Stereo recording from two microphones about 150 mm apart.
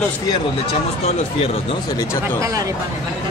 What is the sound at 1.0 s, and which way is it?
Speech, 45° left (ahead or behind).